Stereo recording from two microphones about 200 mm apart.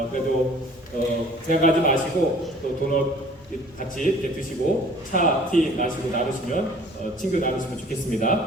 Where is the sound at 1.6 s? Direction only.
45° left (ahead or behind).